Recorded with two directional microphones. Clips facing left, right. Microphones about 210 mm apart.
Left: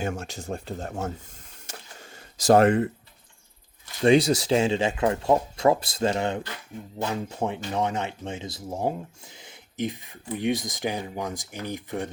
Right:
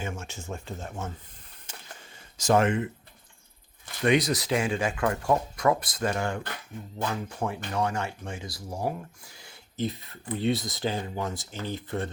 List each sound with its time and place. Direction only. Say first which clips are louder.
0.2 s speech: left 5 dB; 35° left (ahead or behind)
1.6 s a sound: left 3 dB; 40° left (ahead or behind)
4.0 s speech: left 5 dB; 30° left (ahead or behind)